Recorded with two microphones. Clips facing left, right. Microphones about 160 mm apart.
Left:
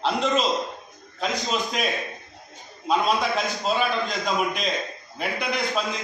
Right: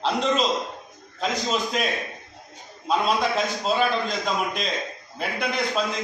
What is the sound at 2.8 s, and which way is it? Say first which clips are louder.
A man's voice: even; centre (ahead or behind).